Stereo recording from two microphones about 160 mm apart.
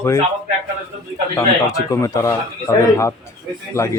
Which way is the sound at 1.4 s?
20° left (ahead or behind).